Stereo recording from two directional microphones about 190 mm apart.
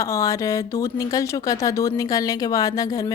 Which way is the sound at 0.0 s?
15° left (ahead or behind).